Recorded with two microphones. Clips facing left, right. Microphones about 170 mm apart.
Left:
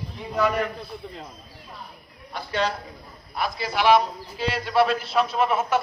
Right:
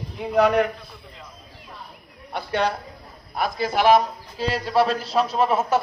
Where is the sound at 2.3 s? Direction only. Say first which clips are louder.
Right 3 dB; 60° right (ahead or behind).